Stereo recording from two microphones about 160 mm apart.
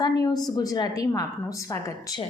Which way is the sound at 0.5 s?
25° left (ahead or behind).